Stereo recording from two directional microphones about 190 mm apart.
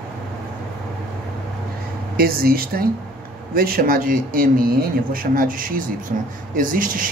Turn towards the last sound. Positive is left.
turn(degrees=-45)  # may be behind; listen again after turning